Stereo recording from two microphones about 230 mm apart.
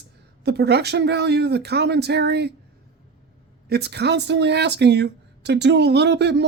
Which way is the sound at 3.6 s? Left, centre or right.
Right.